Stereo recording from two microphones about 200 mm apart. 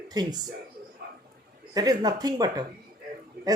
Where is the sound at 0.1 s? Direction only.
20° right (ahead or behind).